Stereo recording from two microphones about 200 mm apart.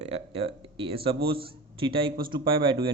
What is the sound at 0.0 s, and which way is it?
A man's voice, 30° right (ahead or behind).